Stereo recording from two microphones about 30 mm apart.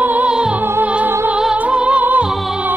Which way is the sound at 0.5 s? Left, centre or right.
Right.